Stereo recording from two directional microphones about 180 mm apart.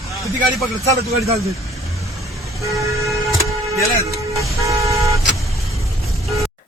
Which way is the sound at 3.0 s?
15° right (ahead or behind).